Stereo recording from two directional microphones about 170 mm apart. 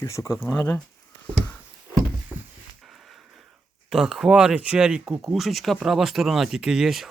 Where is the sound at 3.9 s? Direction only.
Centre (ahead or behind).